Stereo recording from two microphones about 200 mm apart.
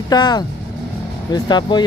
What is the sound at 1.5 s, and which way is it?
Speech, 20° left (ahead or behind).